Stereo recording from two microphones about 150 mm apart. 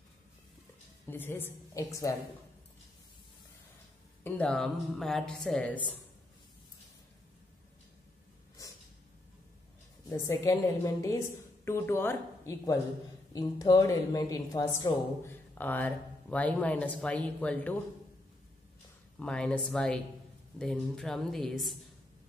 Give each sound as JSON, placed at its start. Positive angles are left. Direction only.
{"t": 1.0, "sound": "speech", "side_deg": 15}
{"t": 4.2, "sound": "a woman's voice", "side_deg": 5}
{"t": 10.0, "sound": "a woman's voice", "side_deg": 20}
{"t": 15.5, "sound": "speech", "side_deg": 10}
{"t": 19.1, "sound": "a woman's voice", "side_deg": 5}